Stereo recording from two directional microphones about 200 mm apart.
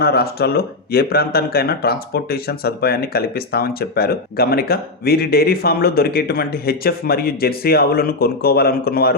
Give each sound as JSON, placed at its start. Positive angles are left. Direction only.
{"t": 0.0, "sound": "speech", "side_deg": 50}